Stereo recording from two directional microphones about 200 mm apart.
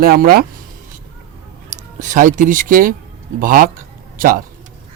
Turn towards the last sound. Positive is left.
turn(degrees=-45)  # may be behind; listen again after turning